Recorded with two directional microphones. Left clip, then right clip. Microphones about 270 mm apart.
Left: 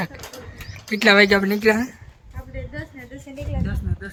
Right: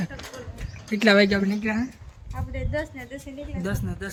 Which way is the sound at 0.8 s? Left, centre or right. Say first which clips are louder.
Left 4 dB; centre.